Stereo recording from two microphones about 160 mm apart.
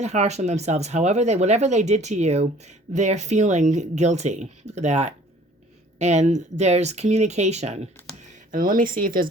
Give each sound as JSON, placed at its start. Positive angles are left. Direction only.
{"t": 0.0, "sound": "speech", "side_deg": -45}
{"t": 8.5, "sound": "speech", "side_deg": -60}